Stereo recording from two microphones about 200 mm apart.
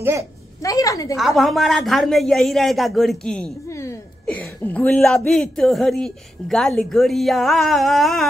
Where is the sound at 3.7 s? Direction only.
15° left (ahead or behind).